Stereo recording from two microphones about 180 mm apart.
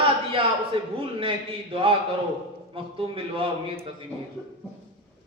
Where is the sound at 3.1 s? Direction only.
30° right (ahead or behind).